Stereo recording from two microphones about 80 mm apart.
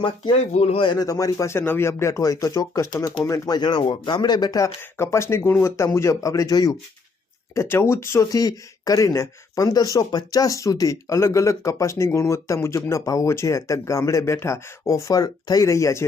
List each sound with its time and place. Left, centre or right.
0.9 s speech: left
3.5 s speech: left
4.8 s speech: left
7.5 s speech: left
8.3 s speech: left
15.6 s speech: left